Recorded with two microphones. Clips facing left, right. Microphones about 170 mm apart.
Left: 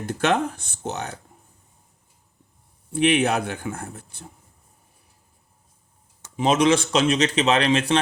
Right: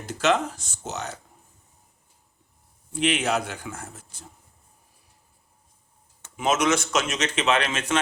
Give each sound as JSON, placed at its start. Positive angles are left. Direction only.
{"t": 0.0, "sound": "speech", "side_deg": 55}
{"t": 2.9, "sound": "speech", "side_deg": 55}
{"t": 6.3, "sound": "speech", "side_deg": 35}